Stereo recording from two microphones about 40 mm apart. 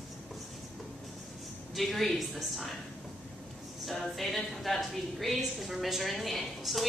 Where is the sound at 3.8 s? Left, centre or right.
Centre.